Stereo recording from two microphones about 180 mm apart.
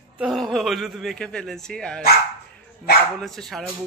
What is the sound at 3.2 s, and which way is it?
Speech, centre (ahead or behind).